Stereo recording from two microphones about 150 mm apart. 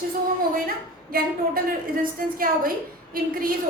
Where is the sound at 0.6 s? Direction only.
75° right (ahead or behind).